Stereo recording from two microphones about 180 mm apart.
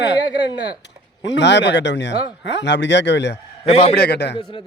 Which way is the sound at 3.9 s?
65° left (ahead or behind).